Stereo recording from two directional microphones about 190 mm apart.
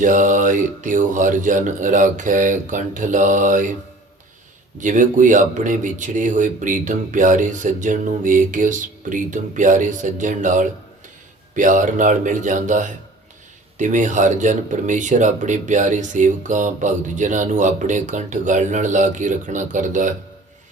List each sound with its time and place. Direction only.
0.0 s speech: 45° right (ahead or behind)
4.8 s speech: 45° right (ahead or behind)